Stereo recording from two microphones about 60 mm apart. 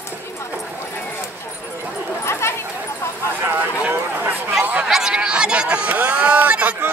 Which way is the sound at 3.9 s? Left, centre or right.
Right.